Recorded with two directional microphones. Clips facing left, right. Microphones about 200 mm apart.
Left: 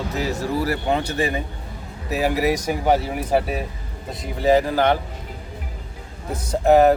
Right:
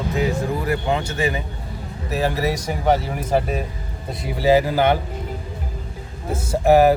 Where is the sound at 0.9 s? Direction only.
35° left (ahead or behind).